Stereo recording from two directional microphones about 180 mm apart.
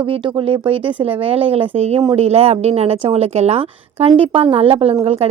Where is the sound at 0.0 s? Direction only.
30° right (ahead or behind).